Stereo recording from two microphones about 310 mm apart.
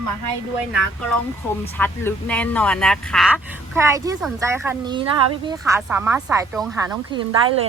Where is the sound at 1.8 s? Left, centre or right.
Centre.